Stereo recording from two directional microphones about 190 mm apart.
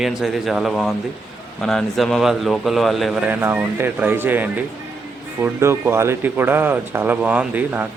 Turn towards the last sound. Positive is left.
turn(degrees=-10)  # may be behind; listen again after turning